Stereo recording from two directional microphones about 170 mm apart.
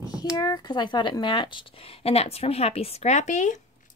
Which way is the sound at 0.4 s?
25° left (ahead or behind).